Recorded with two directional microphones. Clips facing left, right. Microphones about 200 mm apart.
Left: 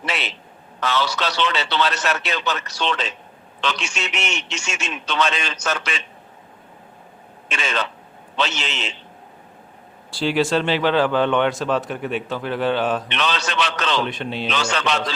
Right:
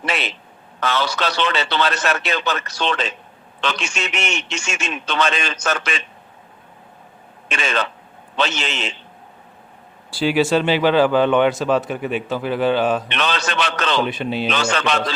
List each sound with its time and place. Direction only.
0.0 s a sound: 50° right (ahead or behind)
0.8 s a man's voice: 50° right (ahead or behind)
7.4 s a man's voice: 50° right (ahead or behind)
10.1 s speech: 5° right (ahead or behind)
13.1 s a man's voice: 50° right (ahead or behind)
14.0 s speech: 5° right (ahead or behind)
14.4 s a man's voice: 50° right (ahead or behind)